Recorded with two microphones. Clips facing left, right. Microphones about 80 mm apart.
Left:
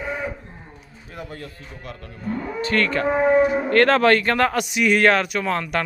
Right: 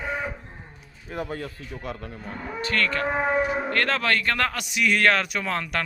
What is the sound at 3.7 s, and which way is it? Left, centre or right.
Speech, left.